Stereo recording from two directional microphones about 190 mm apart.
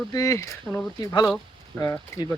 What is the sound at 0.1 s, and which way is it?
Speech, 15° left (ahead or behind).